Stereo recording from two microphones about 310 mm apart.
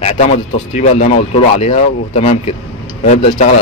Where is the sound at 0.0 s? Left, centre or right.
Left.